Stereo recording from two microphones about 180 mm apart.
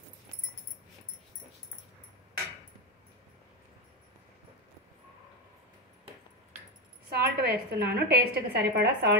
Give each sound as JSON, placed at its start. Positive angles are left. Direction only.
{"t": 7.1, "sound": "a woman's voice", "side_deg": -60}